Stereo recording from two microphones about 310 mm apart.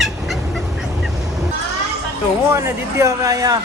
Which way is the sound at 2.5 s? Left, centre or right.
Centre.